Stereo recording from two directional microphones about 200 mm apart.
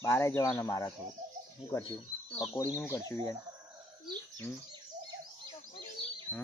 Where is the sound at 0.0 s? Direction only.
10° left (ahead or behind).